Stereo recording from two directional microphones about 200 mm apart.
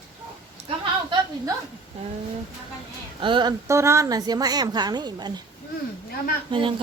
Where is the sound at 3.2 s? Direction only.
25° right (ahead or behind).